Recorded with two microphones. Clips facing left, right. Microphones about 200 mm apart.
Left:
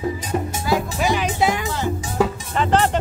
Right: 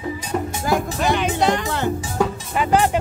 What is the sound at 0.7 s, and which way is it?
Music, 50° right (ahead or behind).